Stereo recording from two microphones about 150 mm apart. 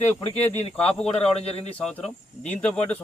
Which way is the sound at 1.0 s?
40° left (ahead or behind).